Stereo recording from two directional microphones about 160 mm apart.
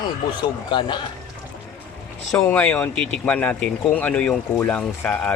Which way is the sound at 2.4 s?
10° left (ahead or behind).